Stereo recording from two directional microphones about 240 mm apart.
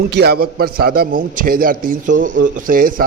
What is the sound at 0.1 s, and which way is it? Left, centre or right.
A man's voice, right.